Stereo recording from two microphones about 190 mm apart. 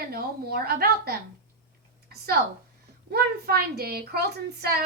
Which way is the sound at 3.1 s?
55° right (ahead or behind).